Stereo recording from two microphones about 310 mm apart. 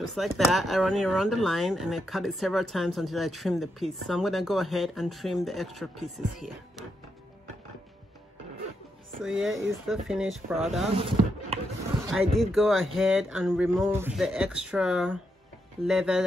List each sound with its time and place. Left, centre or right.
0.1 s speech: centre
9.2 s speech: centre
11.0 s chopping: centre
12.1 s speech: centre